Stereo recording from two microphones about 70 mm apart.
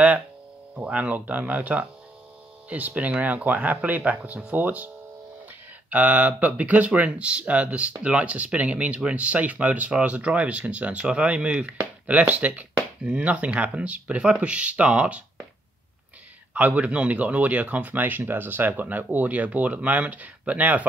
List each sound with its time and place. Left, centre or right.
0.7 s speech: right
16.5 s speech: right